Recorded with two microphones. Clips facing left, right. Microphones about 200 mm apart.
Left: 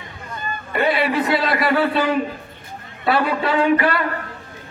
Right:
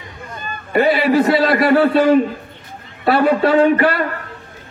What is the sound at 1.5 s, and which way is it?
A man's voice, 50° right (ahead or behind).